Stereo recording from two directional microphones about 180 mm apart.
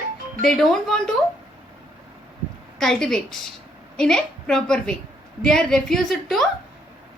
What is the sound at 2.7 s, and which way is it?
A woman's voice, centre (ahead or behind).